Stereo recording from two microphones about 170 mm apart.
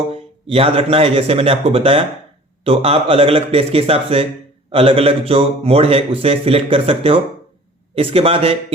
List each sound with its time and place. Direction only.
0.1 s a man's voice: 35° right (ahead or behind)